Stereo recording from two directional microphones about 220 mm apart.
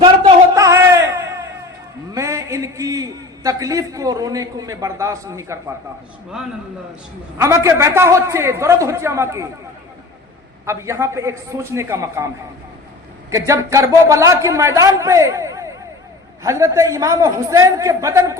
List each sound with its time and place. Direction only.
0.5 s a sound: 15° right (ahead or behind)
2.1 s a man's voice: 15° right (ahead or behind)
7.3 s a man's voice: 10° right (ahead or behind)
10.7 s a man's voice: 10° right (ahead or behind)
13.3 s a man's voice: 15° right (ahead or behind)